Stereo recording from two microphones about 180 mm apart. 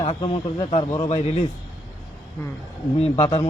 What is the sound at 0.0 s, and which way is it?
A man's voice, 30° left (ahead or behind).